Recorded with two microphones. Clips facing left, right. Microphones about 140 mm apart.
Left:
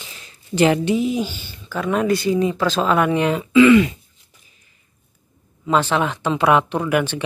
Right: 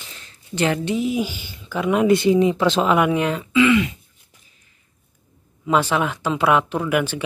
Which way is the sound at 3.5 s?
40° left (ahead or behind).